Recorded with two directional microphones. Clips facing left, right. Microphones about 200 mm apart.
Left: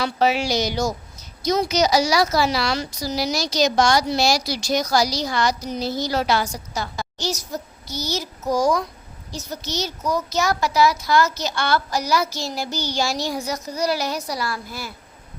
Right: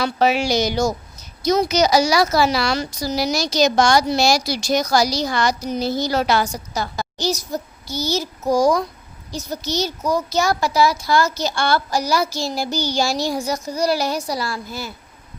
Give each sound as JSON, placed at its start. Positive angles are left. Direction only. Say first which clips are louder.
{"t": 0.0, "sound": "a woman's voice", "louder": "right 2 dB", "side_deg": -60}
{"t": 6.7, "sound": "a child's voice", "louder": "right 3 dB", "side_deg": -40}